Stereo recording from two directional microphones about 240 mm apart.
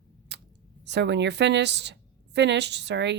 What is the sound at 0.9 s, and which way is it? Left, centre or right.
A woman's voice, right.